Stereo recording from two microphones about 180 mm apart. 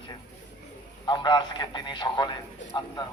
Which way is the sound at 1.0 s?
25° left (ahead or behind).